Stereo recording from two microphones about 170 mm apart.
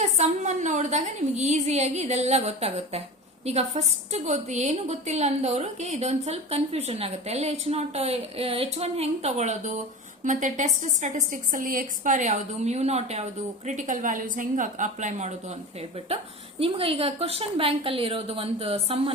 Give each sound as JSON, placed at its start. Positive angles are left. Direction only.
{"t": 0.0, "sound": "a woman's voice", "side_deg": -45}